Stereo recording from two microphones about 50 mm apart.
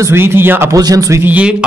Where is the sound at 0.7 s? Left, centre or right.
Right.